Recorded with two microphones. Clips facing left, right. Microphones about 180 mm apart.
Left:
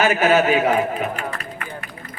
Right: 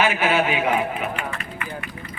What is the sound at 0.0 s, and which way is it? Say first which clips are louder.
A man's voice: left 4 dB; 40° left (ahead or behind).